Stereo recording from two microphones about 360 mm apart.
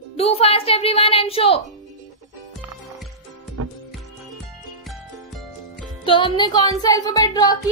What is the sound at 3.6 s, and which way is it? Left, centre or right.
Music, right.